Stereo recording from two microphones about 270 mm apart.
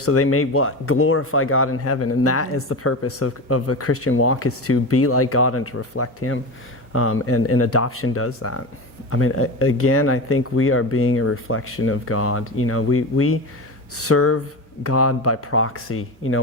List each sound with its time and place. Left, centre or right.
0.0 s speech: left